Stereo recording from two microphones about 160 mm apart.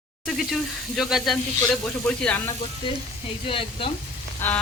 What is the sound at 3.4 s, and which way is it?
Speech, 35° left (ahead or behind).